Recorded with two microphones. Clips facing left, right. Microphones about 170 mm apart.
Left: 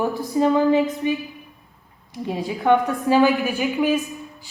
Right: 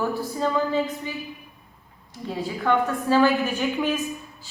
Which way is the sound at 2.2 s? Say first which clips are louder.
Left 5 dB; 15° left (ahead or behind).